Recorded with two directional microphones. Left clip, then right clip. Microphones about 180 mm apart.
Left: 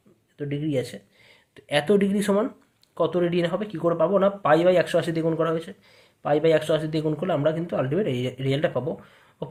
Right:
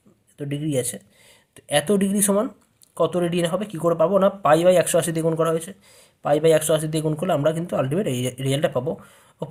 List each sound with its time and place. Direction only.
0.3 s speech: 40° right (ahead or behind)